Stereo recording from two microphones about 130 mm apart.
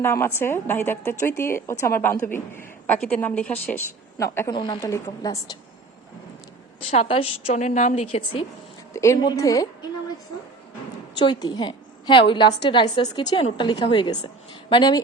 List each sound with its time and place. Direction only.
0.0 s a woman's voice: 20° left (ahead or behind)
4.2 s speech: 25° left (ahead or behind)
4.5 s speech: 35° left (ahead or behind)
6.9 s a woman's voice: 50° left (ahead or behind); by 8.0 s 70° left (ahead or behind)
8.1 s a woman's voice: 45° left (ahead or behind)
8.9 s speech: 25° left (ahead or behind)
11.2 s a woman's voice: 35° left (ahead or behind)